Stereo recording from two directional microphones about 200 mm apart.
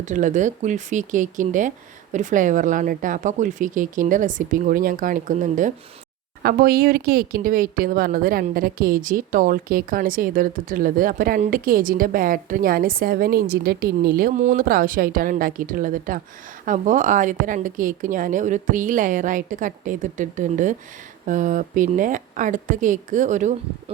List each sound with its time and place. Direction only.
0.0 s a woman's voice: 40° right (ahead or behind)